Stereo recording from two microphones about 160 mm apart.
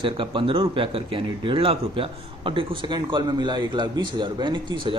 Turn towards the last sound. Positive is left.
turn(degrees=-30)  # may be behind; listen again after turning